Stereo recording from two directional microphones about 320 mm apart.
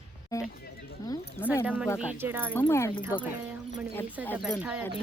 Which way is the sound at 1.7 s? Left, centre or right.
Centre.